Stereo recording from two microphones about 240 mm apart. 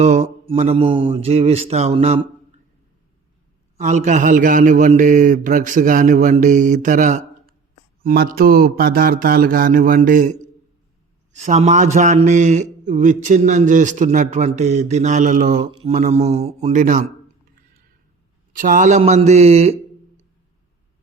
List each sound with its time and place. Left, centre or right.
0.0 s a man's voice: right
3.8 s a man's voice: right
18.5 s a man's voice: right